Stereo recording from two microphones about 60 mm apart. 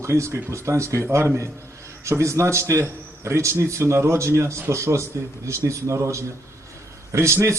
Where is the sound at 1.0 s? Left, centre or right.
Right.